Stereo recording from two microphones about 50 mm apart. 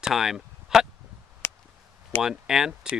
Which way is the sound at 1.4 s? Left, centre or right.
Left.